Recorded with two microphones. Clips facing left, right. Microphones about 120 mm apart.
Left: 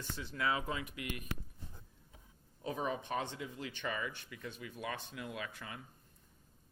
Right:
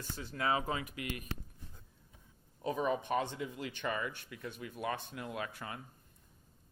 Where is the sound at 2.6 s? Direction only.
60° right (ahead or behind).